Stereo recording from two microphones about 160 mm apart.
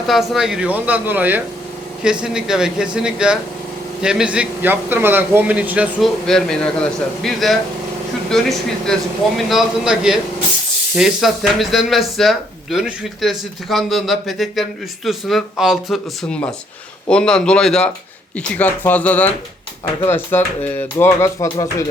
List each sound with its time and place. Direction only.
0.1 s a man's voice: centre (ahead or behind)
6.2 s speech: 5° left (ahead or behind); by 21.8 s 20° left (ahead or behind)